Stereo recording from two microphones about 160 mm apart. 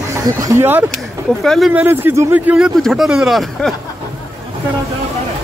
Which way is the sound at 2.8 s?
Centre (ahead or behind).